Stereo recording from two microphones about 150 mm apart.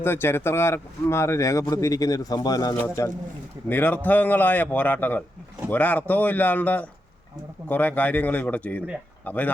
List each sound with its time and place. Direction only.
0.0 s speech: 15° left (ahead or behind)